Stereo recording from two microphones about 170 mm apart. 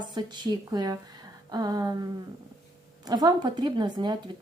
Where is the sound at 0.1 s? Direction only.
25° right (ahead or behind).